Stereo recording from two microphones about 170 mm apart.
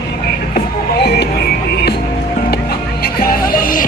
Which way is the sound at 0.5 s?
75° left (ahead or behind).